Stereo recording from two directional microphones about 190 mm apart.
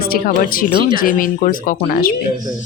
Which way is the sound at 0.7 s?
25° right (ahead or behind).